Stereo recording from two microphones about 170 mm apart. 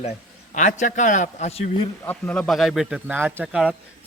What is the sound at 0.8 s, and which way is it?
A man's voice, 45° left (ahead or behind).